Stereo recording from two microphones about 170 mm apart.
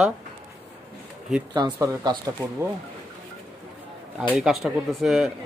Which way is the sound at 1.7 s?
20° right (ahead or behind).